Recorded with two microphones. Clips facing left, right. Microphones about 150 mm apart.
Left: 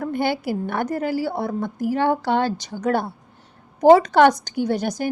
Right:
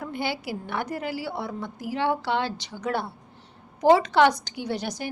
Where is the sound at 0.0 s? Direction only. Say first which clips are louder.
Left 7 dB; 50° left (ahead or behind).